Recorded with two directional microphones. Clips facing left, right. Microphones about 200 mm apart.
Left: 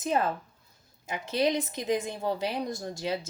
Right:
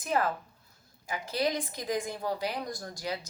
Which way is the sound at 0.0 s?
25° left (ahead or behind).